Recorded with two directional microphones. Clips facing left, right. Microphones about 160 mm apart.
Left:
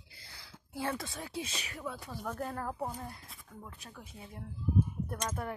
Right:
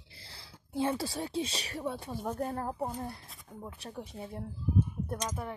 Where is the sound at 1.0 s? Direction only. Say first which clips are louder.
Right 6 dB; 30° right (ahead or behind).